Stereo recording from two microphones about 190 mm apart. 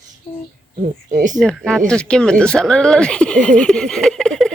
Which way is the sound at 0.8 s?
40° right (ahead or behind).